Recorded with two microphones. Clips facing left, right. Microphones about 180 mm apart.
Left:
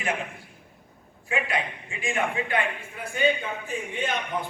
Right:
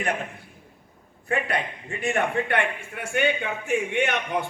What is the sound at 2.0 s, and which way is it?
A man's voice, 65° right (ahead or behind).